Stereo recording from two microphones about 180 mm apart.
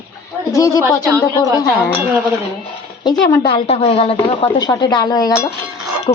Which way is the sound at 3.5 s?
30° left (ahead or behind).